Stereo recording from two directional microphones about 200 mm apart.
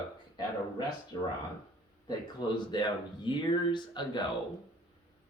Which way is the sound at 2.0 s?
20° left (ahead or behind).